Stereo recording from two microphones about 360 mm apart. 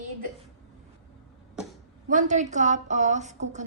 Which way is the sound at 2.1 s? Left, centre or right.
Centre.